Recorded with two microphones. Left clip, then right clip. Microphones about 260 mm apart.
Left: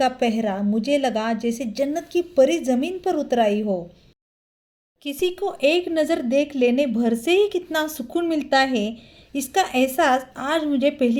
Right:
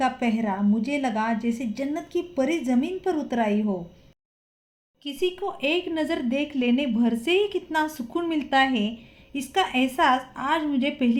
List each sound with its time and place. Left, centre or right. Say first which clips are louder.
0.0 s a woman's voice: left 4 dB; left
5.0 s a woman's voice: left 3 dB; left